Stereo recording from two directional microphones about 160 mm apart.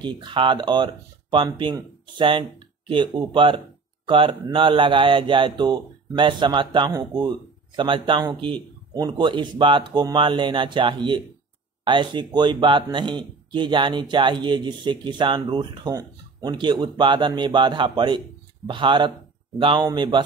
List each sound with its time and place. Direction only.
0.0 s speech: 30° right (ahead or behind)